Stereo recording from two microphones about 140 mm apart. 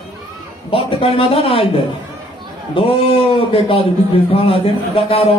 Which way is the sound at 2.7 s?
40° left (ahead or behind).